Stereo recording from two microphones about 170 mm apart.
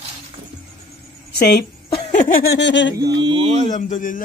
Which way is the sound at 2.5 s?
90° left.